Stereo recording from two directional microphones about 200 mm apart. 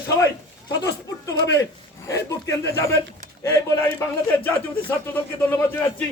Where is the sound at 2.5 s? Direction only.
15° left (ahead or behind).